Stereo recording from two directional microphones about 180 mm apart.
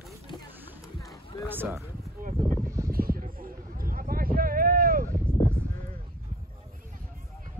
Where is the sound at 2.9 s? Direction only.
55° right (ahead or behind).